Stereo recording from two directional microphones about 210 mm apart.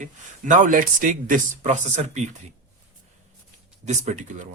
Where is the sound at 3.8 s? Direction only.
35° right (ahead or behind).